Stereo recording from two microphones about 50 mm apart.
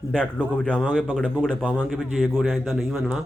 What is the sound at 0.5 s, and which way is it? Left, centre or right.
Speech, left.